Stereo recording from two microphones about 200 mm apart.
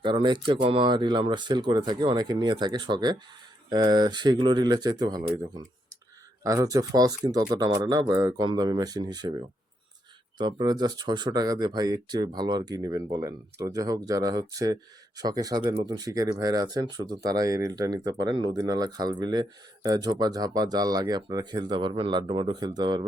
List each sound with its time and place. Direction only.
0.0 s speech: 25° right (ahead or behind)
10.3 s speech: 20° right (ahead or behind)